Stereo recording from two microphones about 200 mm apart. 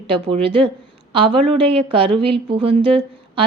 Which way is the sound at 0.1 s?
25° right (ahead or behind).